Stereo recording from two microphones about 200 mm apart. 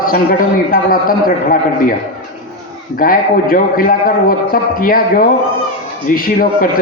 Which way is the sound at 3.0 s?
45° left (ahead or behind).